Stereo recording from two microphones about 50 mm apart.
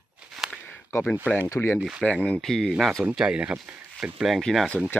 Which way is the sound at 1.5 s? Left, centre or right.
Left.